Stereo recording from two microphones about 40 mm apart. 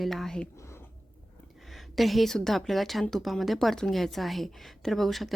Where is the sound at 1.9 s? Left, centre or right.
Centre.